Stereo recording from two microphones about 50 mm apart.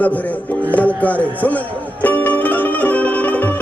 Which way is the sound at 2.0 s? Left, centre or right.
Left.